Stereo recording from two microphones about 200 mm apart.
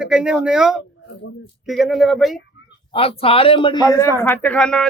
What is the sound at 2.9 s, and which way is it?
Speech, 30° left (ahead or behind).